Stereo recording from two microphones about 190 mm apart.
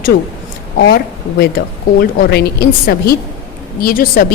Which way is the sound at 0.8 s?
55° left (ahead or behind).